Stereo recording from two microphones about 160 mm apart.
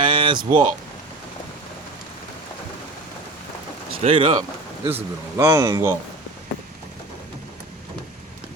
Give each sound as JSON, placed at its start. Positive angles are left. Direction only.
{"t": 0.0, "sound": "a sound", "side_deg": -30}
{"t": 4.0, "sound": "speech", "side_deg": -35}
{"t": 4.9, "sound": "speech", "side_deg": -15}